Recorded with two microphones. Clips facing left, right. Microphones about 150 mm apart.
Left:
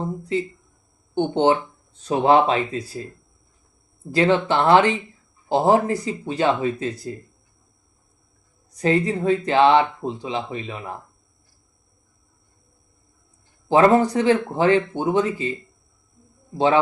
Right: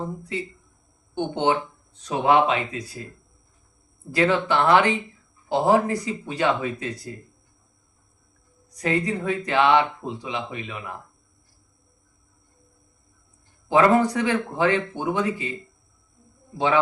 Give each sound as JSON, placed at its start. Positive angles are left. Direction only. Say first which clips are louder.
{"t": 1.1, "sound": "speech", "louder": "left 4 dB", "side_deg": 30}
{"t": 8.8, "sound": "speech", "louder": "left 4 dB", "side_deg": 30}
{"t": 13.7, "sound": "speech", "louder": "left 2 dB", "side_deg": 30}
{"t": 16.6, "sound": "speech", "louder": "left 3 dB", "side_deg": 30}